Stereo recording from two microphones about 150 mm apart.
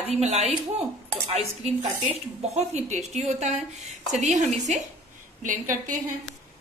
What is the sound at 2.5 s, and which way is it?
A woman's voice, 50° right (ahead or behind).